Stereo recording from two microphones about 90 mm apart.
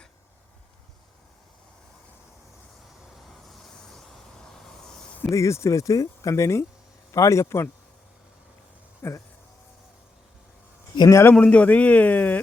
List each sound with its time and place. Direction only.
3.1 s vehicle: centre (ahead or behind)
5.3 s speech: 35° left (ahead or behind)
9.0 s speech: 30° left (ahead or behind)
11.1 s a man's voice: 30° left (ahead or behind)
11.3 s speech: 15° left (ahead or behind)